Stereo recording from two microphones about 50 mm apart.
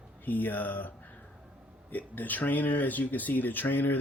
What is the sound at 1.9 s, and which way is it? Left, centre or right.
Speech, left.